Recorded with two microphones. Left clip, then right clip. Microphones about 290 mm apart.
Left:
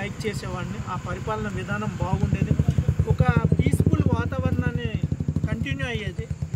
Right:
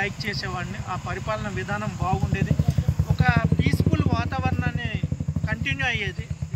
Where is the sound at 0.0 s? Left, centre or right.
Centre.